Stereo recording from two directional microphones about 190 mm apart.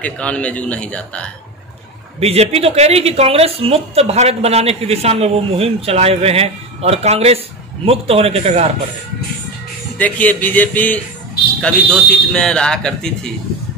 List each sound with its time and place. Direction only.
0.0 s a man's voice: 5° left (ahead or behind)
2.1 s a woman's voice: 35° right (ahead or behind)
9.9 s a man's voice: 10° left (ahead or behind)